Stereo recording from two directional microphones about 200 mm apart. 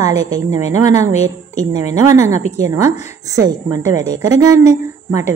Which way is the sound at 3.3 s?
15° right (ahead or behind).